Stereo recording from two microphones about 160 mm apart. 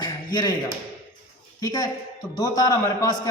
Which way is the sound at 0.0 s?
25° left (ahead or behind).